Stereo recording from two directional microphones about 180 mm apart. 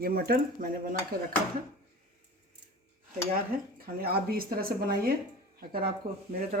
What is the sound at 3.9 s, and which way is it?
Speech, 55° right (ahead or behind).